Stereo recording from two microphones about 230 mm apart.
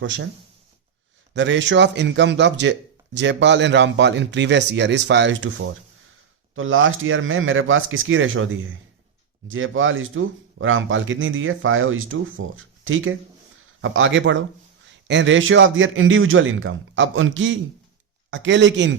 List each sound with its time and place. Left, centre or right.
0.0 s a man's voice: right
1.3 s a man's voice: right